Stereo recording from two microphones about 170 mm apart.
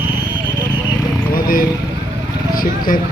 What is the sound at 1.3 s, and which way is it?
Vehicle, 55° left (ahead or behind).